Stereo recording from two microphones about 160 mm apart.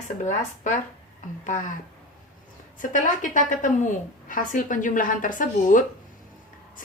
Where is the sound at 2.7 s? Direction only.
55° left (ahead or behind).